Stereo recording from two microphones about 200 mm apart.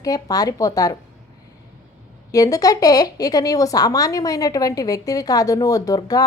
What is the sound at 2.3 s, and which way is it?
A woman's voice, 15° left (ahead or behind).